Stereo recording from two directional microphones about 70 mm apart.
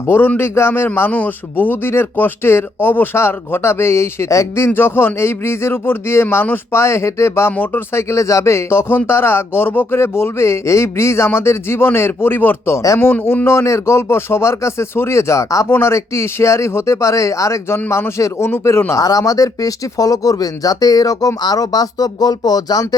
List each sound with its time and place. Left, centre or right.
0.1 s speech: left
7.5 s speech: left
8.1 s speech: left
12.7 s speech: left
13.0 s speech: left
17.7 s speech: left
18.9 s speech: left